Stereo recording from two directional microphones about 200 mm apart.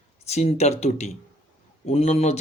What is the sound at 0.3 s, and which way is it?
A man's voice, 35° left (ahead or behind).